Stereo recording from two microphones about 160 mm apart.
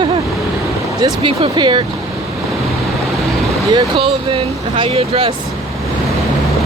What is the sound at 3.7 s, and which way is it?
Speech, 30° right (ahead or behind).